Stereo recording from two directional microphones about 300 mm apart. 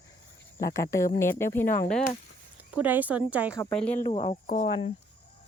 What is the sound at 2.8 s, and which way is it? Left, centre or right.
Speech, centre.